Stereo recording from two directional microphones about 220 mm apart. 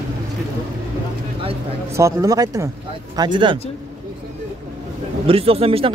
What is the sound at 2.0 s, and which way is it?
Speech, 15° right (ahead or behind).